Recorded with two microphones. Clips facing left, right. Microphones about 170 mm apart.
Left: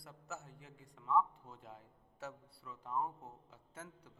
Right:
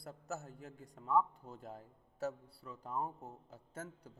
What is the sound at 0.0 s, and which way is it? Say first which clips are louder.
A man's voice: right 5 dB; 40° right (ahead or behind).